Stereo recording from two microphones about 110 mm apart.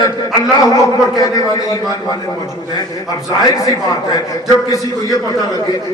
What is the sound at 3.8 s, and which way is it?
A man's voice, 35° left (ahead or behind).